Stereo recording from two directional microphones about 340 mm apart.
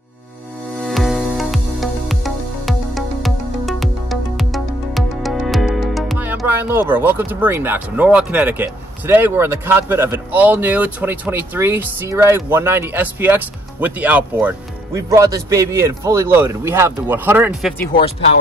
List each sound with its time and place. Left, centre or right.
0.8 s music: centre
15.0 s speech: centre
17.9 s speech: left